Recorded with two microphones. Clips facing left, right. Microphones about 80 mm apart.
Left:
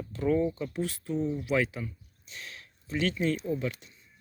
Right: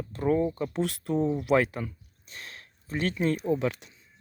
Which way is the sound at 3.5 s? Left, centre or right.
Right.